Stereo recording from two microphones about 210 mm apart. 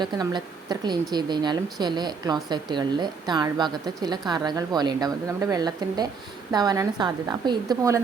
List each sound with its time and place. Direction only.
0.0 s speech: 20° right (ahead or behind)